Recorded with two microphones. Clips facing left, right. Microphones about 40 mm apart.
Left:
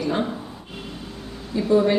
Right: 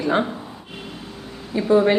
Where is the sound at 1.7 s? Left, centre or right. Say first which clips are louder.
Right 2 dB; right.